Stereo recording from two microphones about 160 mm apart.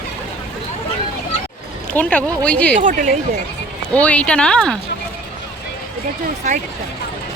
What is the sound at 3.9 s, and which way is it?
Speech, 10° left (ahead or behind).